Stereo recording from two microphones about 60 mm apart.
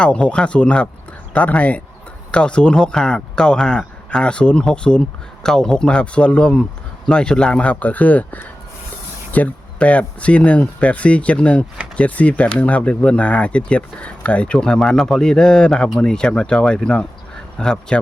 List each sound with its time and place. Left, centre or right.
0.0 s speech: centre